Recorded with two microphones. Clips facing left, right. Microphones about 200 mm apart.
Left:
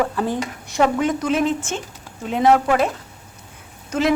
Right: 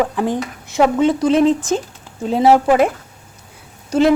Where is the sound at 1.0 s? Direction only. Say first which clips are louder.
Right 6 dB; 30° right (ahead or behind).